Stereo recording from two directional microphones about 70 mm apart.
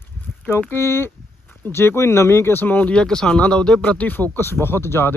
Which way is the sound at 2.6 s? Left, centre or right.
Left.